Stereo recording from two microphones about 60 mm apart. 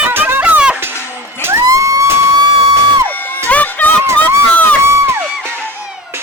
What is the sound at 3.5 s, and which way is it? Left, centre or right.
Music, left.